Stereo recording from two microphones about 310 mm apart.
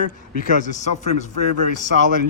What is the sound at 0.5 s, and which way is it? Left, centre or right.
A man's voice, left.